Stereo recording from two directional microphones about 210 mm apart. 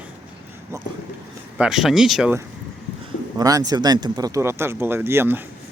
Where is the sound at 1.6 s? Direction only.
Centre (ahead or behind).